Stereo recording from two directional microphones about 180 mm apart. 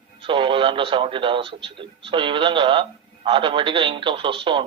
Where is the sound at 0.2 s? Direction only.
30° right (ahead or behind).